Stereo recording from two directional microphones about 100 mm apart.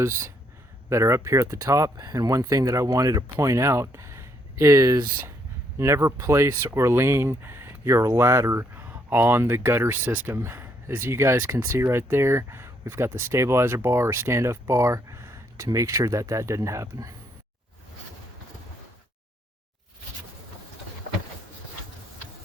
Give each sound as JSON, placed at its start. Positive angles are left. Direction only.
{"t": 0.0, "sound": "speech", "side_deg": -30}